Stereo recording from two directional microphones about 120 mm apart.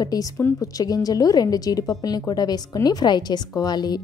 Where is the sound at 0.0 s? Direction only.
30° left (ahead or behind).